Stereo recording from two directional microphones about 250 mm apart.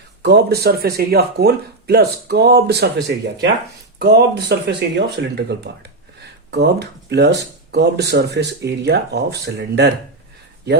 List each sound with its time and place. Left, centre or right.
0.2 s speech: right